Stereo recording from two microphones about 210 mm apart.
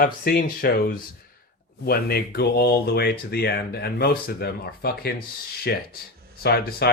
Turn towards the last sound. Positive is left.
turn(degrees=50)  # may be behind; listen again after turning